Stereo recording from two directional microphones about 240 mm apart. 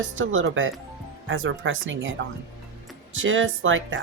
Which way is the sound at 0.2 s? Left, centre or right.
Right.